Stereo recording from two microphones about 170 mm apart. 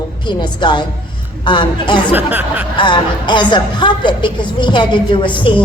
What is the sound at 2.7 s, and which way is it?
A woman's voice, 30° left (ahead or behind).